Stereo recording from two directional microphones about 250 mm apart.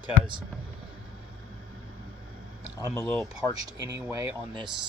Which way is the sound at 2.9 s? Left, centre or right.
Centre.